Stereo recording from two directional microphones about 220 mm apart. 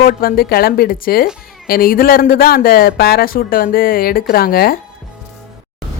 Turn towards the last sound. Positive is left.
turn(degrees=45)  # may be behind; listen again after turning